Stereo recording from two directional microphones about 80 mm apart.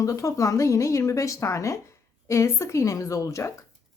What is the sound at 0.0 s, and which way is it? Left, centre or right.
Speech, left.